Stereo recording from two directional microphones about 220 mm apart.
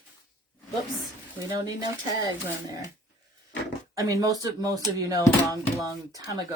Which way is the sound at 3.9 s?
15° right (ahead or behind).